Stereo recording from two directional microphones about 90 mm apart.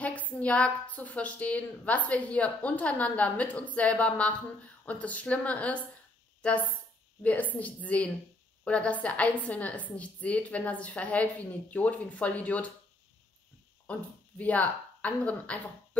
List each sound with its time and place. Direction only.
0.0 s a woman's voice: 15° left (ahead or behind)
13.9 s a woman's voice: 15° left (ahead or behind)